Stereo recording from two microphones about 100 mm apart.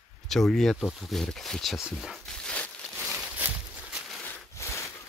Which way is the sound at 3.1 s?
5° right (ahead or behind).